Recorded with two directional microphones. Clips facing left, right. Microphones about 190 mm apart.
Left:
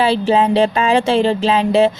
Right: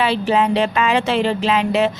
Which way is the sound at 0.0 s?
30° left (ahead or behind).